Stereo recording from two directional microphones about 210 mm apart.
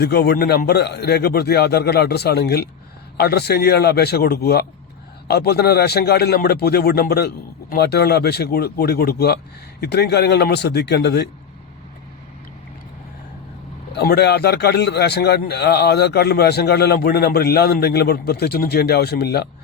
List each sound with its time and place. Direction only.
0.0 s a man's voice: 50° left (ahead or behind)
13.9 s a man's voice: 50° left (ahead or behind)